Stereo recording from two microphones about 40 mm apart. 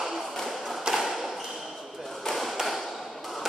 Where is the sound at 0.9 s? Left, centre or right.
Centre.